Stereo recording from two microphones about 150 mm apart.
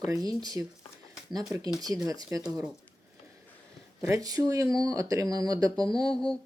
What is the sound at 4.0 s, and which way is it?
Speech, 20° right (ahead or behind).